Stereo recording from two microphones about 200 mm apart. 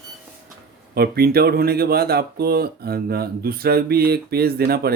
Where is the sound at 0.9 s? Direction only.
50° right (ahead or behind).